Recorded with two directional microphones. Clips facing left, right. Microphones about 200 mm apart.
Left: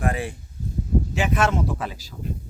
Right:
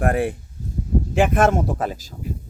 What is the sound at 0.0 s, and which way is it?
Speech, 55° right (ahead or behind).